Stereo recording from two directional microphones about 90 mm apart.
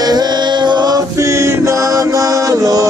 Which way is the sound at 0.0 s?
50° right (ahead or behind).